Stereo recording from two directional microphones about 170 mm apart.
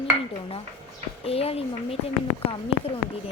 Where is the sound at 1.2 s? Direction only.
35° left (ahead or behind).